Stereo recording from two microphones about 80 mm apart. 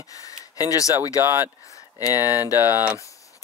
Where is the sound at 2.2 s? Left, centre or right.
Left.